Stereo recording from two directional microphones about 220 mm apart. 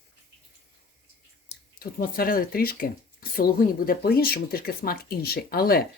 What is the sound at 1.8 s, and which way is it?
A woman's voice, 40° left (ahead or behind).